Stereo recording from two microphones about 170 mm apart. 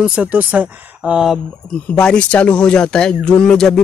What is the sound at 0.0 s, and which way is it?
Speech, 5° right (ahead or behind).